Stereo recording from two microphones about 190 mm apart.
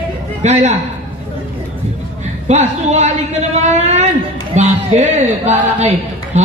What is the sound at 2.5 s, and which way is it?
A woman's voice, 35° right (ahead or behind).